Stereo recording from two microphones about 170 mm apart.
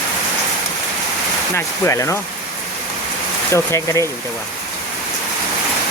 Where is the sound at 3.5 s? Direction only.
15° left (ahead or behind).